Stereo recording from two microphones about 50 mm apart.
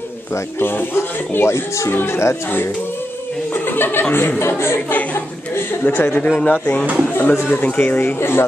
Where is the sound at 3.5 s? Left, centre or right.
Left.